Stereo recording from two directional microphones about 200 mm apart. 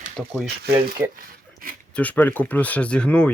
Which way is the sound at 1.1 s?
45° right (ahead or behind).